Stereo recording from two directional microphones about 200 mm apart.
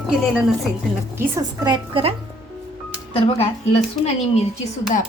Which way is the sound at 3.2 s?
30° left (ahead or behind).